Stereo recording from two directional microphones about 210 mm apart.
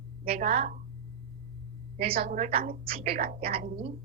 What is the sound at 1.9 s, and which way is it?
A woman's voice, 45° right (ahead or behind).